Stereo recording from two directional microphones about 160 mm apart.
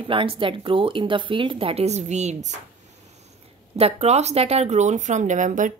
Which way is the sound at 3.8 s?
40° right (ahead or behind).